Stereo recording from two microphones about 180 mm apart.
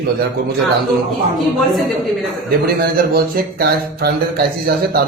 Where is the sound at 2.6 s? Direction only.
60° right (ahead or behind).